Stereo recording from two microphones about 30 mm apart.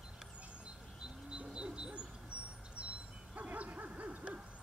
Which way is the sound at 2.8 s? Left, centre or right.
Right.